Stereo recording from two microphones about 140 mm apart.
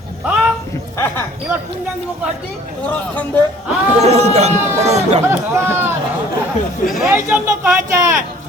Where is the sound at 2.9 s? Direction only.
10° left (ahead or behind).